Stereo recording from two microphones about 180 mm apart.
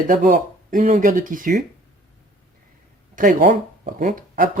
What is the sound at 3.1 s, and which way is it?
Speech, 50° right (ahead or behind).